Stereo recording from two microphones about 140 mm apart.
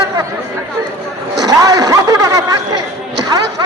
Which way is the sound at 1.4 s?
25° right (ahead or behind).